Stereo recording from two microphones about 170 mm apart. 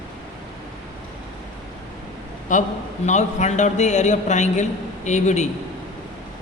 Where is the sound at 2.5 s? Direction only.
50° left (ahead or behind).